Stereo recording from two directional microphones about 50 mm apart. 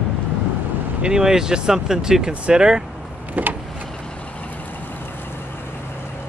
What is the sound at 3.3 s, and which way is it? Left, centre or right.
Vehicle, right.